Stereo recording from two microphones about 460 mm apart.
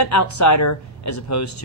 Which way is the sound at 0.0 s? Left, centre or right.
Left.